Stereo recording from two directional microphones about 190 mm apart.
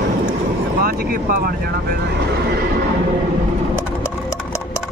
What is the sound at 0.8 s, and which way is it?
Speech, 50° right (ahead or behind).